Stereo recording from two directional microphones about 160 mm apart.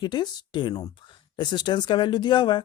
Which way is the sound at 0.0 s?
25° left (ahead or behind).